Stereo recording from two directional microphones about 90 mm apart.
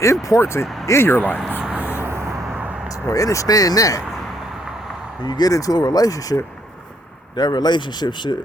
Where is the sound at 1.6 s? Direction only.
10° right (ahead or behind); by 2.4 s 30° right (ahead or behind).